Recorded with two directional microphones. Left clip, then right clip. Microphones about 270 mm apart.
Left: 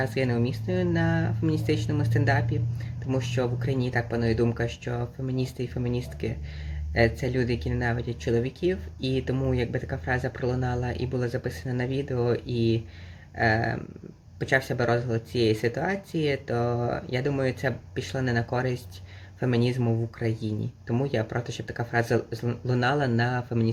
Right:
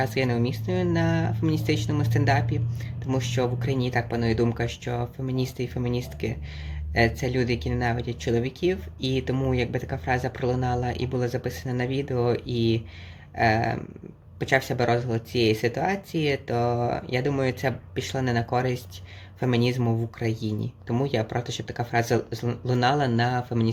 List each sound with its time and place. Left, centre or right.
0.0 s speech: centre